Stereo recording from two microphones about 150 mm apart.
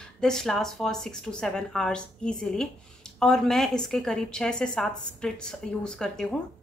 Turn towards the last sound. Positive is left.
turn(degrees=5)  # may be behind; listen again after turning